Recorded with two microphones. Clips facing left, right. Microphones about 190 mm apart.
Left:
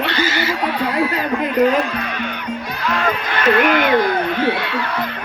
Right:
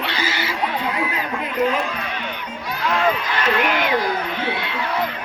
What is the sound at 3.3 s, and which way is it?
Speech, 60° left (ahead or behind).